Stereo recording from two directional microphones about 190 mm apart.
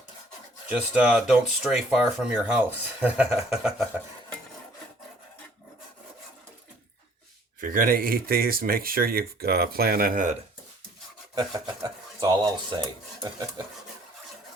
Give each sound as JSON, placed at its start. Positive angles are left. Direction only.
{"t": 0.7, "sound": "speech", "side_deg": -5}
{"t": 7.6, "sound": "speech", "side_deg": -45}
{"t": 11.3, "sound": "speech", "side_deg": -20}